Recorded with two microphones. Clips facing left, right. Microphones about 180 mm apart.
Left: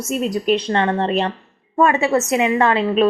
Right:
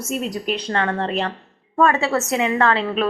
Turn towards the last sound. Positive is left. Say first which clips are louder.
# left 4 dB
turn(degrees=20)  # may be behind; listen again after turning